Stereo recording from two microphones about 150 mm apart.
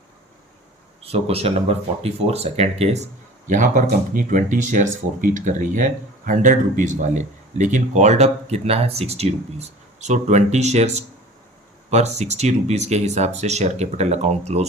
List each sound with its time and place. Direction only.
1.0 s speech: 40° right (ahead or behind)
3.5 s speech: 55° right (ahead or behind)